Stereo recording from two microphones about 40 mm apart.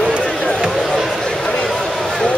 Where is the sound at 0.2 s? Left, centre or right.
Centre.